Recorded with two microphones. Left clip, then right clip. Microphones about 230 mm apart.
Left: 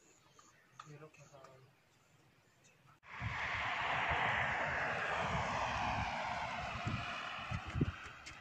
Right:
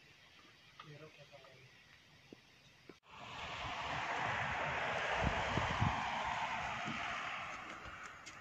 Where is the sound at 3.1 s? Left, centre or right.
Left.